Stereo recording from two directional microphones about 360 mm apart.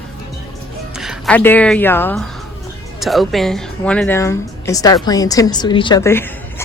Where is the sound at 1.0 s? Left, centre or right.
Centre.